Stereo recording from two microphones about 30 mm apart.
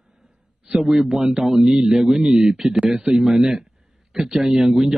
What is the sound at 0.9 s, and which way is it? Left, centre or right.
A man's voice, centre.